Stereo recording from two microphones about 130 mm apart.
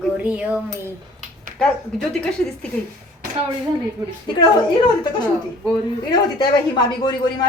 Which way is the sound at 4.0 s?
30° right (ahead or behind).